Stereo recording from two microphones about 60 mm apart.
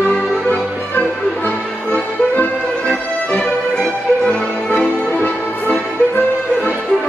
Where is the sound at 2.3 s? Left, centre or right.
Left.